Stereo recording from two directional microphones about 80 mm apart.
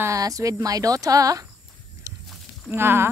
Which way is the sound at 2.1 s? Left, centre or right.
Right.